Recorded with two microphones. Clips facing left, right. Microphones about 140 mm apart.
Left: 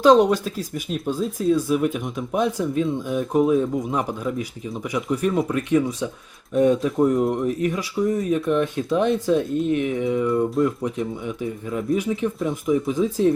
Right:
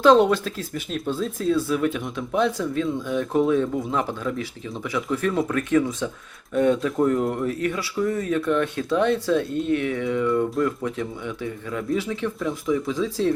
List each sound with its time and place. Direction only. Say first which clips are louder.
0.0 s speech: left 1 dB; 15° left (ahead or behind)